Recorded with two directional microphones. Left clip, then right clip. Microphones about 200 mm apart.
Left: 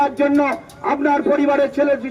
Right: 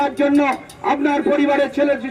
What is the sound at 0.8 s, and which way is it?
Speech, 25° right (ahead or behind).